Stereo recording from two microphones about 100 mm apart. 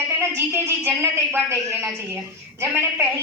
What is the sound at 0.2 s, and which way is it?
A woman's voice, 25° right (ahead or behind).